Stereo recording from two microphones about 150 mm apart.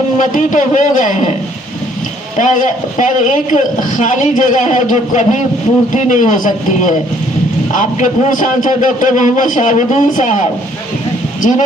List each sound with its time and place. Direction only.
0.2 s a man's voice: 60° left (ahead or behind)
2.4 s a man's voice: 60° left (ahead or behind)